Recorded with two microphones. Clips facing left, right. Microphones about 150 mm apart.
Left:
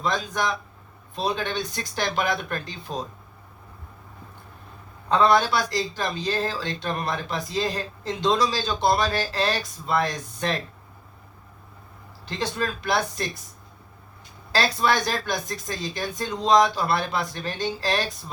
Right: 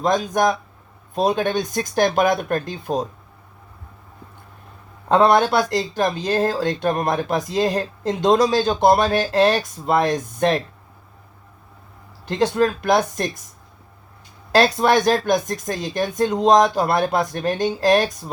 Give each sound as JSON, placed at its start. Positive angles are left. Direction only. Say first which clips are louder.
{"t": 0.0, "sound": "speech", "louder": "right 8 dB", "side_deg": -45}
{"t": 5.0, "sound": "speech", "louder": "right 4 dB", "side_deg": -50}
{"t": 12.2, "sound": "speech", "louder": "right 10 dB", "side_deg": -50}
{"t": 14.5, "sound": "speech", "louder": "right 7 dB", "side_deg": -50}